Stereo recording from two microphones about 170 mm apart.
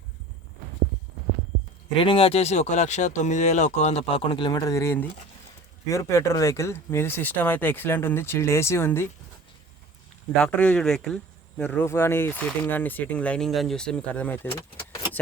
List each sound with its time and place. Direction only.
2.0 s speech: 35° left (ahead or behind); by 9.0 s 15° left (ahead or behind)
10.3 s speech: 5° left (ahead or behind)